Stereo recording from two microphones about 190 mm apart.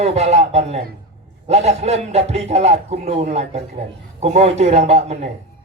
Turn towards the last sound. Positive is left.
turn(degrees=-35)  # may be behind; listen again after turning